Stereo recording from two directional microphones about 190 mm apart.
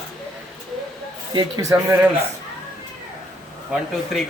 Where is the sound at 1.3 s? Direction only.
20° right (ahead or behind).